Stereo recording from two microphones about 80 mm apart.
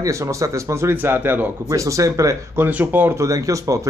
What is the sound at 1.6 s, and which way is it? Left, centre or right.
Speech, right.